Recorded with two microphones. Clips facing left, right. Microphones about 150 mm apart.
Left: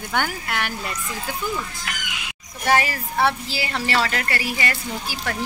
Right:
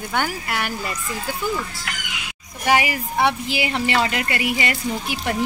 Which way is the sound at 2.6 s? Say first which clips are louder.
Right 1 dB; 15° right (ahead or behind).